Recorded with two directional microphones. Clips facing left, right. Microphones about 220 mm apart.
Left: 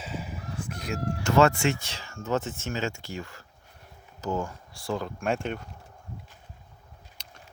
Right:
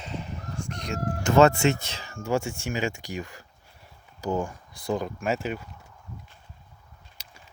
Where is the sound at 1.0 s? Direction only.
50° right (ahead or behind).